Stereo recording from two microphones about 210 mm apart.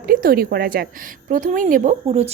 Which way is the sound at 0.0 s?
45° right (ahead or behind).